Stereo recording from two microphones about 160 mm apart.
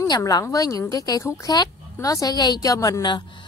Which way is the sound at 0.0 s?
25° left (ahead or behind).